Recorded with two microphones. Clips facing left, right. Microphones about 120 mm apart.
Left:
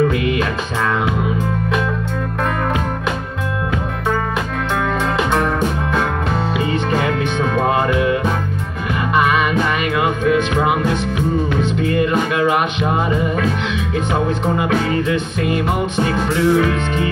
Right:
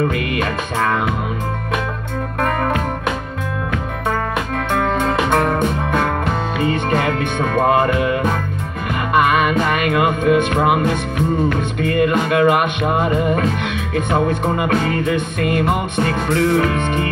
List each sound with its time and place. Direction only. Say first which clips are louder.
0.3 s music: left 1 dB; 50° right (ahead or behind)
5.3 s music: right 1 dB; 55° right (ahead or behind)
11.9 s music: right 4 dB; 55° right (ahead or behind)
14.6 s music: even; 55° right (ahead or behind)